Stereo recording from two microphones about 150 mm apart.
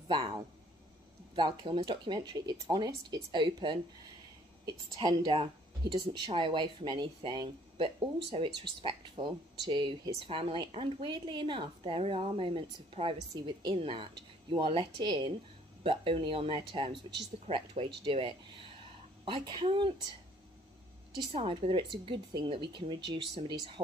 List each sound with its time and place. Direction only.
0.1 s speech: 30° right (ahead or behind)
21.3 s speech: 35° right (ahead or behind)